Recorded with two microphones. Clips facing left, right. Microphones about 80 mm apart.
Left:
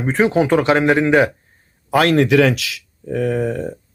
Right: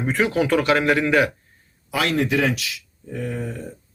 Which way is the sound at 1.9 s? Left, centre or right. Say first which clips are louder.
Left 8 dB; left.